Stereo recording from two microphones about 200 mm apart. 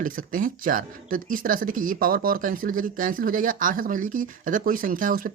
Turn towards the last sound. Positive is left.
turn(degrees=-45)  # may be behind; listen again after turning